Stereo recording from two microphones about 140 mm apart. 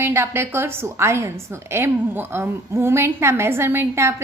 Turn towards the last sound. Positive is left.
turn(degrees=-20)  # may be behind; listen again after turning